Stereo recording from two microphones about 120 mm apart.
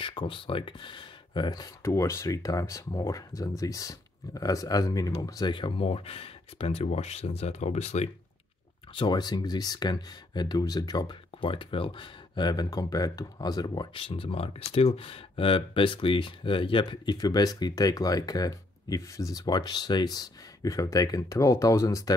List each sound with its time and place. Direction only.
0.0 s speech: 45° left (ahead or behind)
1.8 s speech: 25° left (ahead or behind); by 8.1 s 65° left (ahead or behind)
8.9 s speech: 40° left (ahead or behind)